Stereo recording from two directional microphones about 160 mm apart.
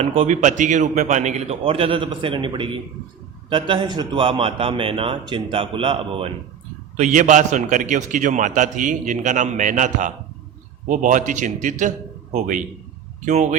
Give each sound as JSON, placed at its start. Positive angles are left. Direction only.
{"t": 0.0, "sound": "a man's voice", "side_deg": -40}
{"t": 6.9, "sound": "a man's voice", "side_deg": -50}